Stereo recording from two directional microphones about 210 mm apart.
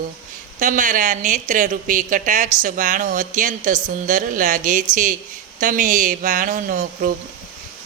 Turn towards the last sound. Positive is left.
turn(degrees=-40)  # may be behind; listen again after turning